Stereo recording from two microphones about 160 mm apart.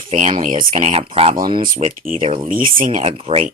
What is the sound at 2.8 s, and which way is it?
Speech, 40° right (ahead or behind).